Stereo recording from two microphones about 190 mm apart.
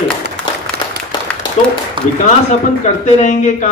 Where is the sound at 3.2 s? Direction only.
40° left (ahead or behind).